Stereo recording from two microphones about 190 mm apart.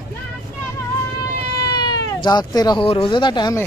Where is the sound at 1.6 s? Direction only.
20° left (ahead or behind).